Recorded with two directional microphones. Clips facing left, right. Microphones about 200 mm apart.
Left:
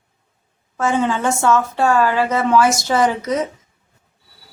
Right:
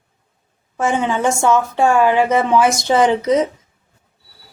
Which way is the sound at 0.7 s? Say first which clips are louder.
Even; 15° right (ahead or behind).